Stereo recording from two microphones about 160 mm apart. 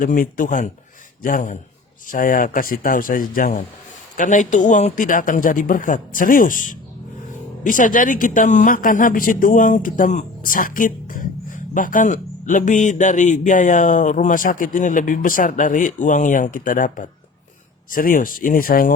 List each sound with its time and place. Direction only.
0.0 s a man's voice: 55° left (ahead or behind)